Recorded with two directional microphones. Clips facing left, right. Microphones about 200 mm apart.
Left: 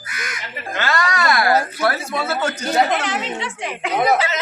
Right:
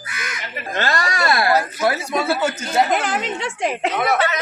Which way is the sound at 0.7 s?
35° right (ahead or behind).